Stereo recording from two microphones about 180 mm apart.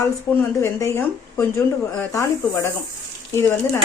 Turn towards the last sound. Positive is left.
turn(degrees=10)  # may be behind; listen again after turning